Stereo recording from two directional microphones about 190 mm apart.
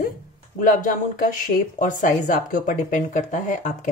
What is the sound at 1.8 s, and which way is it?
Speech, 45° left (ahead or behind).